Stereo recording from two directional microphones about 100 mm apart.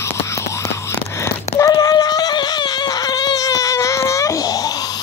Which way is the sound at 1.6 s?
35° left (ahead or behind).